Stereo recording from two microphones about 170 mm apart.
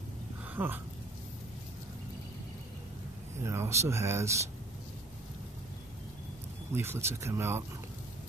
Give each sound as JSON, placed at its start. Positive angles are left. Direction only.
{"t": 0.6, "sound": "speech", "side_deg": -10}
{"t": 3.4, "sound": "speech", "side_deg": -15}
{"t": 6.7, "sound": "speech", "side_deg": -15}